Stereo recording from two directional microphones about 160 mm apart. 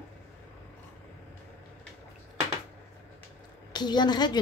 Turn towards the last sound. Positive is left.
turn(degrees=25)  # may be behind; listen again after turning